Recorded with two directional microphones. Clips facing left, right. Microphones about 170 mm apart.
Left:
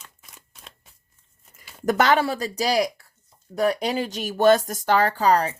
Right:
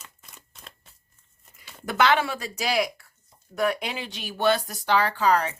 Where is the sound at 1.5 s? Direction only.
45° left (ahead or behind).